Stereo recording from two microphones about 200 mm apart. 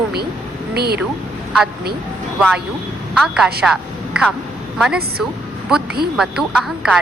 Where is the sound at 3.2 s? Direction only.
5° right (ahead or behind).